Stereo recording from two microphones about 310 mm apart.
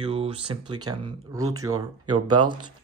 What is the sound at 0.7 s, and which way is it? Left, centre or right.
Speech, centre.